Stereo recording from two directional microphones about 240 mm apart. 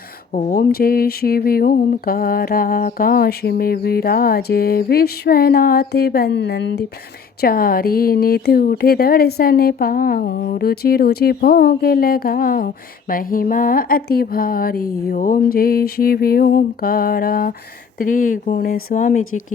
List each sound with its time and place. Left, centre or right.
0.3 s speech: left